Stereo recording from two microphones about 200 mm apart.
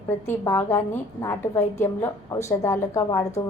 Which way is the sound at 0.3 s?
10° left (ahead or behind).